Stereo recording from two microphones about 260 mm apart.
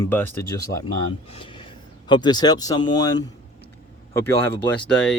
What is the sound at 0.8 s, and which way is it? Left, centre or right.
Speech, centre.